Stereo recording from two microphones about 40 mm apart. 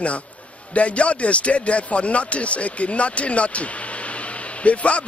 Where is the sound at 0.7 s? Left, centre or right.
Left.